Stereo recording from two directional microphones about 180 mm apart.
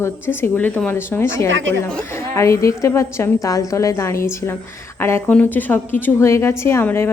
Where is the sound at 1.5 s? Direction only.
90° right.